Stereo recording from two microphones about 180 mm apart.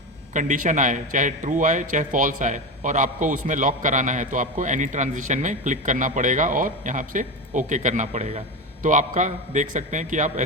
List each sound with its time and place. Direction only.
0.3 s a man's voice: 45° right (ahead or behind)